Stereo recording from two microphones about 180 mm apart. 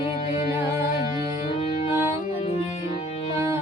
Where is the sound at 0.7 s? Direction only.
15° right (ahead or behind).